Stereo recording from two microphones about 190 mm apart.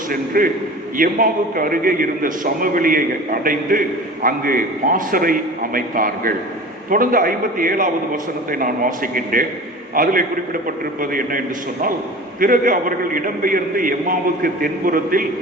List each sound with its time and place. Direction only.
0.1 s a man's voice: 45° right (ahead or behind)